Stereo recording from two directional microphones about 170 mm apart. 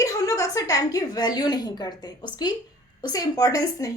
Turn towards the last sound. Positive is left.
turn(degrees=20)  # may be behind; listen again after turning